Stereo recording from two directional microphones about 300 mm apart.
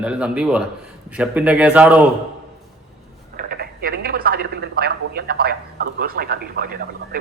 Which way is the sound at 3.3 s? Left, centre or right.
Right.